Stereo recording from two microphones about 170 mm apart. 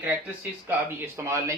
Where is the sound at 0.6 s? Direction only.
15° right (ahead or behind).